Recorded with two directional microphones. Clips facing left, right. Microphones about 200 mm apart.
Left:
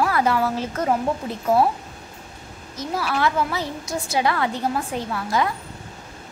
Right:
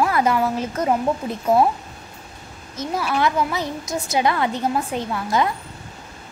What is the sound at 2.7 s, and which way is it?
A woman's voice, 20° right (ahead or behind).